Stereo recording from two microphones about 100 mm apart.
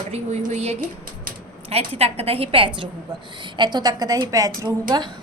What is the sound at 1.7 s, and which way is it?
A woman's voice, 85° right.